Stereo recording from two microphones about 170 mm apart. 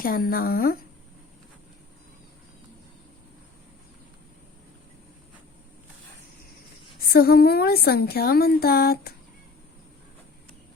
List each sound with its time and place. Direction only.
0.0 s a woman's voice: 60° left (ahead or behind)
7.0 s a woman's voice: 65° left (ahead or behind)